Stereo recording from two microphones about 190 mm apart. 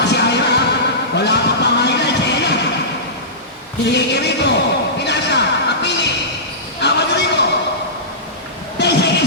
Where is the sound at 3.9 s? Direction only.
60° left (ahead or behind).